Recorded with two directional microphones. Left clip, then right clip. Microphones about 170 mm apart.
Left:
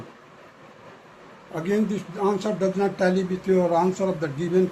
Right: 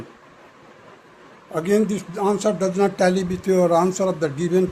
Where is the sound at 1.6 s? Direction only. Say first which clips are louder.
Right 5 dB; 90° right.